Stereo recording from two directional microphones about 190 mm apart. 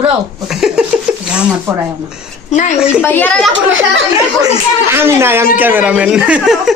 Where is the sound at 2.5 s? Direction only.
35° left (ahead or behind).